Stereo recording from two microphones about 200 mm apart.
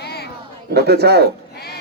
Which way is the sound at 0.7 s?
55° right (ahead or behind).